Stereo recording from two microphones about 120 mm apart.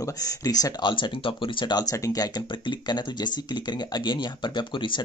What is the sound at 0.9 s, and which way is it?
Speech, 45° left (ahead or behind).